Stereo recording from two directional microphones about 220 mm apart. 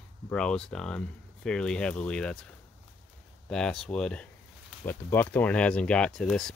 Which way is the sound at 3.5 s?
5° left (ahead or behind).